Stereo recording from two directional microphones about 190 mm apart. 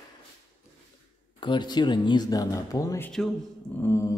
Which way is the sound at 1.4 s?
25° left (ahead or behind).